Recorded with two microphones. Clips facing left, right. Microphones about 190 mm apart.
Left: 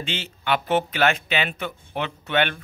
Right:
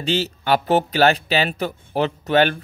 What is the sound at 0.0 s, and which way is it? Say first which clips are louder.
A man's voice: right 8 dB; 40° right (ahead or behind).